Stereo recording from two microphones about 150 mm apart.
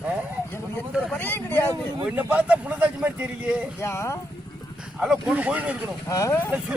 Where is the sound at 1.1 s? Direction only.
15° left (ahead or behind).